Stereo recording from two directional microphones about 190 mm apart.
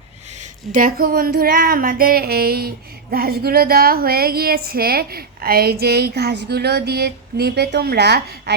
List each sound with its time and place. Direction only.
0.7 s female singing: 45° right (ahead or behind)